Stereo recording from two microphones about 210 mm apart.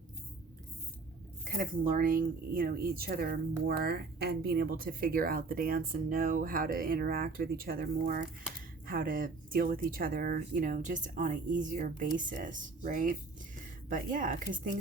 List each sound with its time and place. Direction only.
1.5 s speech: 40° right (ahead or behind)